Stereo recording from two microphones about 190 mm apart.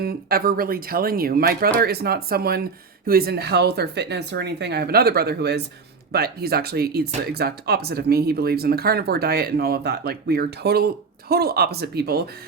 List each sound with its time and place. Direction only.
0.0 s speech: 50° right (ahead or behind)